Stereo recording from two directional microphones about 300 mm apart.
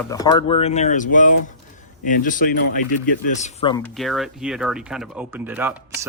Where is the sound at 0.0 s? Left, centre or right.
Centre.